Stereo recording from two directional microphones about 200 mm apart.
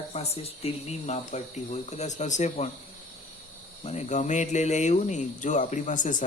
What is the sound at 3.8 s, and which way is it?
Speech, 35° left (ahead or behind).